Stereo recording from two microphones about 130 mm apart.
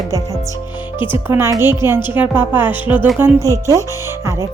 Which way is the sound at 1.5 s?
20° right (ahead or behind).